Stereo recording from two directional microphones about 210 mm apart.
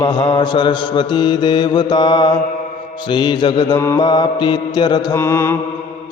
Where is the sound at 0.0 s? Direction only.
20° left (ahead or behind).